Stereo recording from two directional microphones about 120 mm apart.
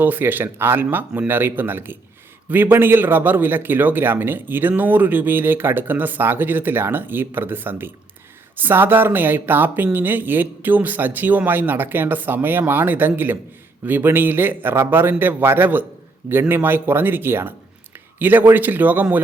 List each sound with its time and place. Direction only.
0.0 s speech: 15° right (ahead or behind)